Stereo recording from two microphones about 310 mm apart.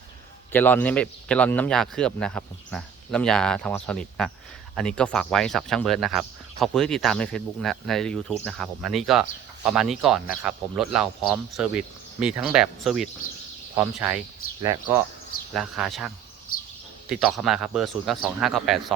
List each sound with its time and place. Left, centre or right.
0.5 s speech: centre
16.5 s a sound: left
17.1 s speech: centre